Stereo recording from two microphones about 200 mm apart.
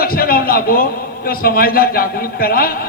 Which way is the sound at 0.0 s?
50° left (ahead or behind).